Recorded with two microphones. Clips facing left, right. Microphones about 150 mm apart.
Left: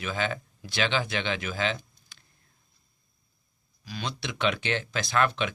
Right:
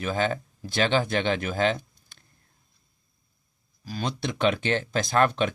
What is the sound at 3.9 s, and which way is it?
Speech, 45° right (ahead or behind).